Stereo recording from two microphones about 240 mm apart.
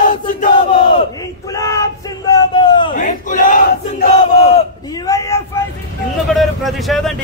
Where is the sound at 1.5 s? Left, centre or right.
Centre.